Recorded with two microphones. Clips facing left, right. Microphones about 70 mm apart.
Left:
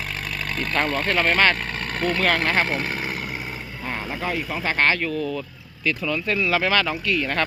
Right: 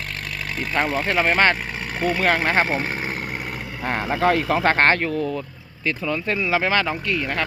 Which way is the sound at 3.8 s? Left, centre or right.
Right.